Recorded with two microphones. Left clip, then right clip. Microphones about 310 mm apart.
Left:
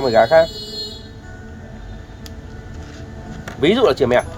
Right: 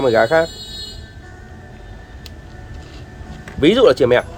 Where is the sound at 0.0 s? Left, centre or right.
Right.